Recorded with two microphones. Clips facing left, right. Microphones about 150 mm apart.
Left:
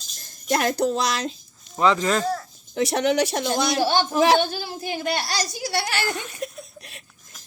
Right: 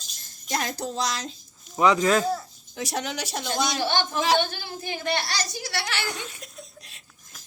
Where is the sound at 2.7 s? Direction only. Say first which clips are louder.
Left 10 dB; 65° left (ahead or behind).